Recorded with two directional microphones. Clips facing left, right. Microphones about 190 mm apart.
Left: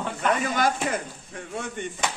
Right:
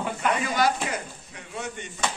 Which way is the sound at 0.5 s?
50° left (ahead or behind).